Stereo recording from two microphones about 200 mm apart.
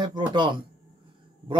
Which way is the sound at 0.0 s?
20° right (ahead or behind).